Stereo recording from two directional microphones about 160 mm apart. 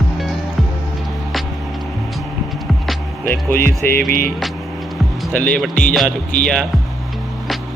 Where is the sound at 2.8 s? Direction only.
10° left (ahead or behind).